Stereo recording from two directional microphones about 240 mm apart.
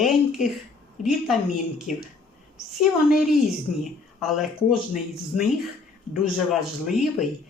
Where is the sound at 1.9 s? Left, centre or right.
Left.